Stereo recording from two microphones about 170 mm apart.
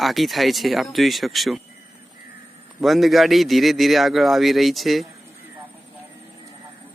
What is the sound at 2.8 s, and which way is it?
A man's voice, centre (ahead or behind).